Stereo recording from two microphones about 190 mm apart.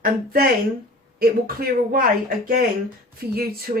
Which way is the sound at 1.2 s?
50° right (ahead or behind).